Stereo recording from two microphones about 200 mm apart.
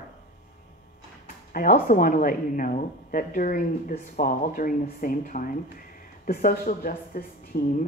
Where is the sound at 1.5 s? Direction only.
45° left (ahead or behind).